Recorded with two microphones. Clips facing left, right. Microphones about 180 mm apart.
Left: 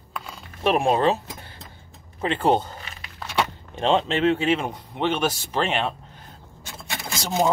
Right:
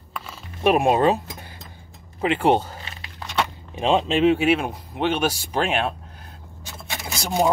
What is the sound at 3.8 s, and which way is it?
Speech, 10° right (ahead or behind).